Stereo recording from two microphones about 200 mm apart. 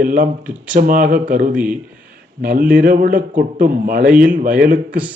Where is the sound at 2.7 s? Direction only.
45° right (ahead or behind).